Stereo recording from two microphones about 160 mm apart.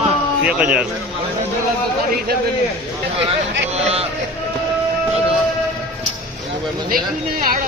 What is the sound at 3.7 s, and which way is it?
Speech, 40° right (ahead or behind).